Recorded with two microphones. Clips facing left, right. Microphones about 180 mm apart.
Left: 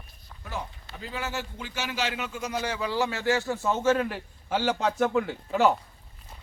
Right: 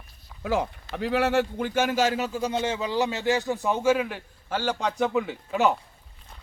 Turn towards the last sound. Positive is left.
turn(degrees=0)  # may be behind; listen again after turning